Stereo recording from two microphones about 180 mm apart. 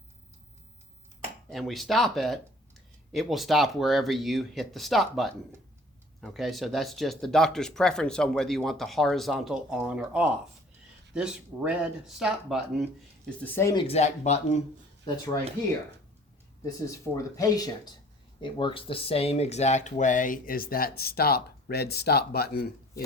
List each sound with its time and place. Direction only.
1.5 s speech: centre (ahead or behind)
13.4 s speech: 10° left (ahead or behind)
13.7 s speech: 35° left (ahead or behind)
16.6 s speech: 20° left (ahead or behind); by 22.7 s 60° left (ahead or behind)